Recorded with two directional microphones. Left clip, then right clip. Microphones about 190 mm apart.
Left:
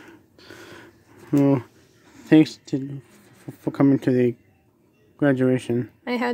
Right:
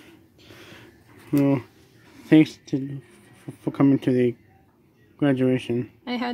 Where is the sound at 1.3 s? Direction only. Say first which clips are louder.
Left 2 dB; 20° left (ahead or behind).